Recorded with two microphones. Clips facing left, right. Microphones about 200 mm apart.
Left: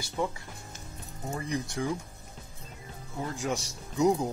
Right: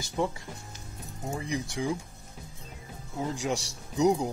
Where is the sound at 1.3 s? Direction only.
10° right (ahead or behind).